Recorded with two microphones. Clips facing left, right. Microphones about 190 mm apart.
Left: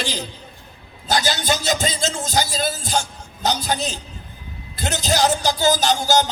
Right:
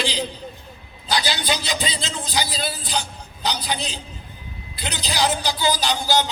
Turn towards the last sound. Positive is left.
turn(degrees=45)  # may be behind; listen again after turning